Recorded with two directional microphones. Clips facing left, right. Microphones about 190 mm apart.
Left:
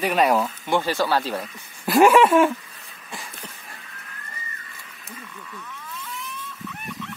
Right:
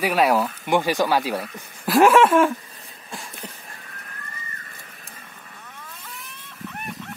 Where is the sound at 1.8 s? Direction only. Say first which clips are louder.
Even; centre (ahead or behind).